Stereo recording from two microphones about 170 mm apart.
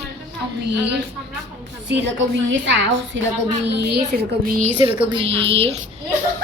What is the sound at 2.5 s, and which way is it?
Speech, 90° right.